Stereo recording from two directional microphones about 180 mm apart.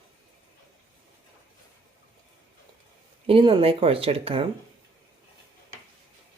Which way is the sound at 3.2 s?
30° right (ahead or behind).